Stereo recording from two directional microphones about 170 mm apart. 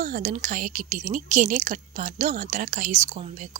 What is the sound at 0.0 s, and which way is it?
Speech, 50° right (ahead or behind).